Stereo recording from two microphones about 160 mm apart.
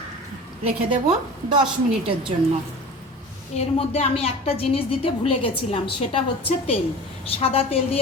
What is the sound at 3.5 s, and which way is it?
A woman's voice, 40° left (ahead or behind).